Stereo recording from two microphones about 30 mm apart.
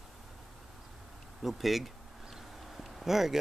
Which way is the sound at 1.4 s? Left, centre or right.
Centre.